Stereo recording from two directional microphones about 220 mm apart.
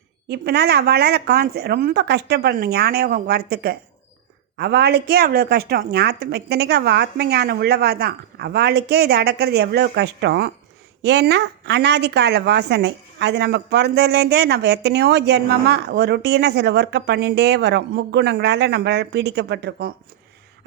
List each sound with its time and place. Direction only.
0.3 s a woman's voice: 45° right (ahead or behind)